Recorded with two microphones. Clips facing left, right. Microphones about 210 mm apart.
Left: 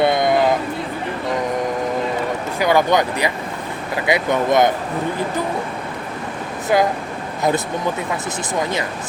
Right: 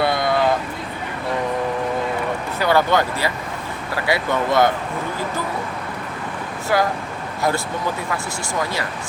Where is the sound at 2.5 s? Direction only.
15° left (ahead or behind).